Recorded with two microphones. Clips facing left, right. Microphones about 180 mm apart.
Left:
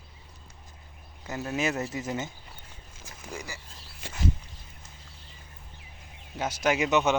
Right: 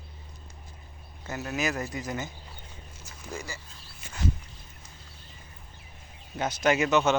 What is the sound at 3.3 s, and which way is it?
Speech, 15° left (ahead or behind).